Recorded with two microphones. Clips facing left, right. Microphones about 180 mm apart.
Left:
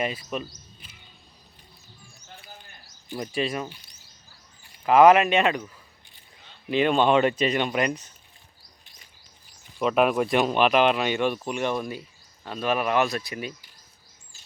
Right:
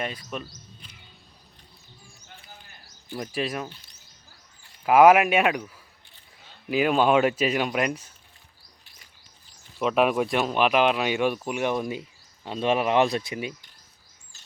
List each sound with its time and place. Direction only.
0.0 s speech: 5° left (ahead or behind)
3.2 s speech: centre (ahead or behind)
4.9 s speech: 10° right (ahead or behind)
6.7 s speech: 5° right (ahead or behind)
9.7 s speech: centre (ahead or behind); by 13.5 s 20° right (ahead or behind)